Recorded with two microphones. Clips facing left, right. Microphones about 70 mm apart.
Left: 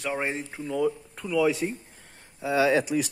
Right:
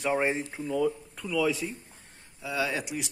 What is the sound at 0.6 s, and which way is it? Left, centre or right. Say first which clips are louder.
Speech: left 2 dB; centre.